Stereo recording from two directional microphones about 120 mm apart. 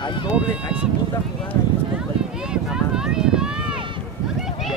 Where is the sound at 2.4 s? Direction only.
5° right (ahead or behind).